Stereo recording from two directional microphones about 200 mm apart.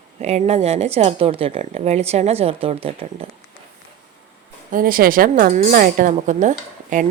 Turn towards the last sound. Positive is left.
turn(degrees=-40)  # may be behind; listen again after turning